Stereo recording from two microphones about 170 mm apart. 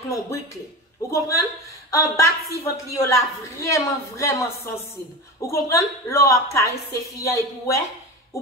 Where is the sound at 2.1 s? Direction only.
15° left (ahead or behind).